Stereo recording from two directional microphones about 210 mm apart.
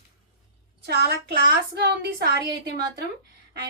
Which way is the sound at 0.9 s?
50° right (ahead or behind).